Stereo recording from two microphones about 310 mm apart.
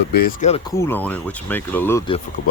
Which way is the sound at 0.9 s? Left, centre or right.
Centre.